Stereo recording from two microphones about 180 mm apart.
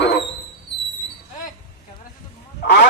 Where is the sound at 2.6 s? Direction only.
65° left (ahead or behind).